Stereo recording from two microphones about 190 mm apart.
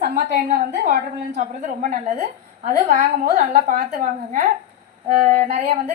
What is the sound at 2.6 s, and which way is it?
A woman's voice, 40° right (ahead or behind).